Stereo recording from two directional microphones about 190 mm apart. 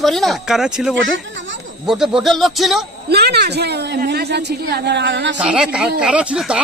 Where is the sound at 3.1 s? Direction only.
55° right (ahead or behind).